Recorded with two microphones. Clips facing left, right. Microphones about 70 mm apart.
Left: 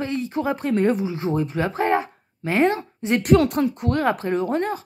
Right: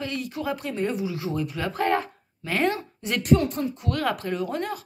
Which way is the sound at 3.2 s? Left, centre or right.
Left.